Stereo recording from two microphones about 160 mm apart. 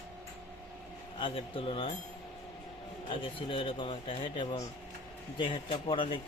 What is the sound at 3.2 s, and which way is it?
Speech, 35° left (ahead or behind).